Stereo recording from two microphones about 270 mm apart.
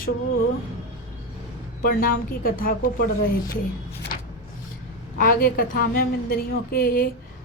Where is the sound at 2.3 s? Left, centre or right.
Left.